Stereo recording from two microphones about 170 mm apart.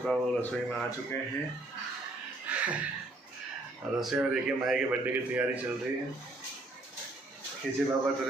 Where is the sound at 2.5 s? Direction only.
10° right (ahead or behind).